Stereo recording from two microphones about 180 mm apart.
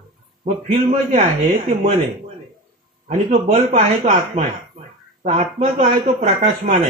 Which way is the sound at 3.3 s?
35° right (ahead or behind).